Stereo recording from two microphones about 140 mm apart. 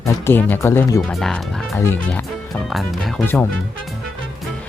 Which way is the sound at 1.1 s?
5° left (ahead or behind).